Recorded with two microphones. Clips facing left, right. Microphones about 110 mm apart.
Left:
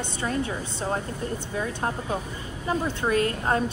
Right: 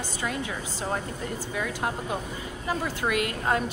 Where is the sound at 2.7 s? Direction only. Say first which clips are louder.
Left 3 dB; 30° left (ahead or behind).